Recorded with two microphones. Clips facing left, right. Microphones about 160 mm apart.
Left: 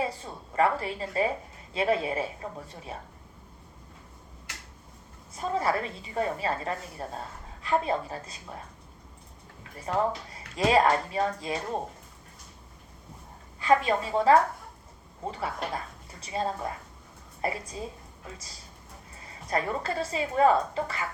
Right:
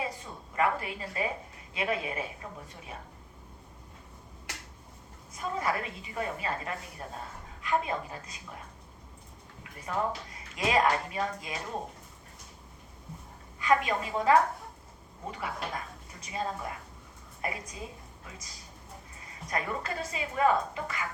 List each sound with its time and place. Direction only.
0.0 s a sound: 30° left (ahead or behind)
1.7 s a woman's voice: 35° left (ahead or behind)
5.4 s a woman's voice: 35° left (ahead or behind)
9.9 s a woman's voice: 35° left (ahead or behind)
13.6 s a woman's voice: 30° left (ahead or behind)
19.5 s a woman's voice: 30° left (ahead or behind)